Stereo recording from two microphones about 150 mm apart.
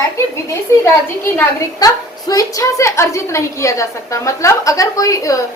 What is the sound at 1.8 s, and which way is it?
A woman's voice, 25° left (ahead or behind).